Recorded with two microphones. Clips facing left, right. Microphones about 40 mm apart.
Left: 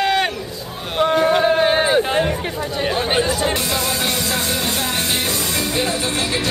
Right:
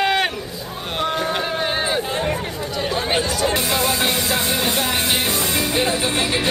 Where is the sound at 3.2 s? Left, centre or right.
Left.